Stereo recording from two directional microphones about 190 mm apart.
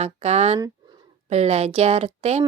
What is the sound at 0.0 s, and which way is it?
A woman's voice, 35° right (ahead or behind).